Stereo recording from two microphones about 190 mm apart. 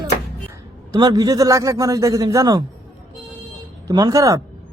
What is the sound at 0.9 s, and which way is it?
A man's voice, 20° right (ahead or behind).